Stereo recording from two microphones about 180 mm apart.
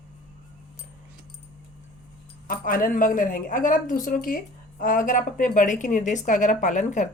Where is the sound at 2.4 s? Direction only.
50° left (ahead or behind).